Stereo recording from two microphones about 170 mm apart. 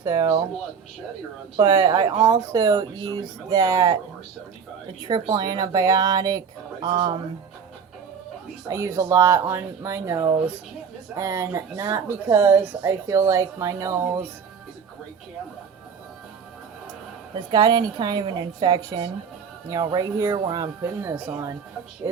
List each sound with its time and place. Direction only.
0.1 s speech: 30° right (ahead or behind)
1.5 s speech: 25° right (ahead or behind)
5.0 s speech: 25° right (ahead or behind)
8.6 s speech: 20° right (ahead or behind)
17.5 s speech: 25° right (ahead or behind)